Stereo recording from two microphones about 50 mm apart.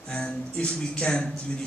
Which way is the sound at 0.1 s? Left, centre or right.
Centre.